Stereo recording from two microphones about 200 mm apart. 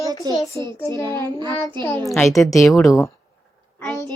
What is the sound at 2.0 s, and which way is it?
Speech, centre (ahead or behind).